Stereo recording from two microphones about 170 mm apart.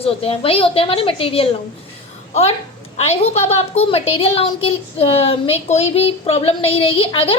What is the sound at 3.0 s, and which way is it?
A child's voice, 40° left (ahead or behind).